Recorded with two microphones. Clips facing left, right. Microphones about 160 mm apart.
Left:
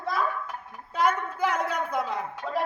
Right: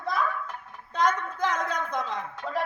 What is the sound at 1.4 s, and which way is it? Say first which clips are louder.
A woman's voice: left 1 dB; 10° left (ahead or behind).